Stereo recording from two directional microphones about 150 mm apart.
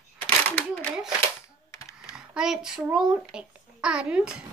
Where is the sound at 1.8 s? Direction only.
20° left (ahead or behind).